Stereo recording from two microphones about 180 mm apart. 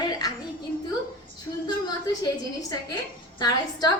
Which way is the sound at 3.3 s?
20° left (ahead or behind).